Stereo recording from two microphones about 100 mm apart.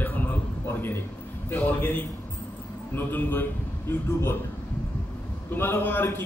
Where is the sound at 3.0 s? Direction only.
20° left (ahead or behind).